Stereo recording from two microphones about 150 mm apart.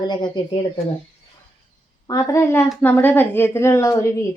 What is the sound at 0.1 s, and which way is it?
Speech, 30° left (ahead or behind).